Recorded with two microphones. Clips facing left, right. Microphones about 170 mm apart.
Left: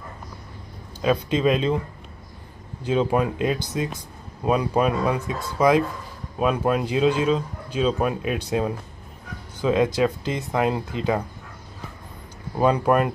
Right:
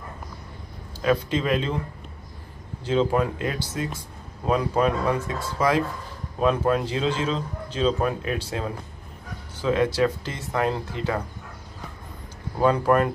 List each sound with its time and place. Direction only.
1.0 s speech: 20° left (ahead or behind)
2.8 s a man's voice: 15° left (ahead or behind)
12.5 s a man's voice: 15° left (ahead or behind)